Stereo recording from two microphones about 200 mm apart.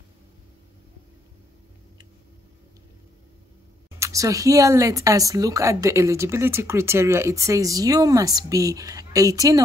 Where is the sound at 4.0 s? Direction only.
15° right (ahead or behind).